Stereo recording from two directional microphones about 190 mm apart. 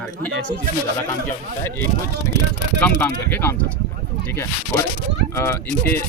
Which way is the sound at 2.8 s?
10° left (ahead or behind).